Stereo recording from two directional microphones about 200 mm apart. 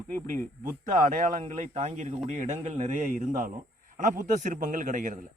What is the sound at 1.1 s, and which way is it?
Speech, 40° right (ahead or behind).